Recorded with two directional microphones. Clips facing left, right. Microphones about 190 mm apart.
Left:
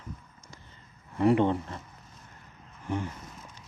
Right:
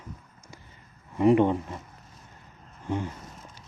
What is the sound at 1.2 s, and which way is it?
Speech, 15° right (ahead or behind).